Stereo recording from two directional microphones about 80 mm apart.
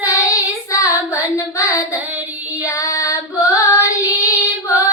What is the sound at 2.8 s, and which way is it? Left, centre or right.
Child singing, left.